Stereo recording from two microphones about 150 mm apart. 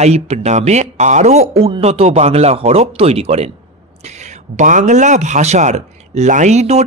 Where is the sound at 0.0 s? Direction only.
45° right (ahead or behind).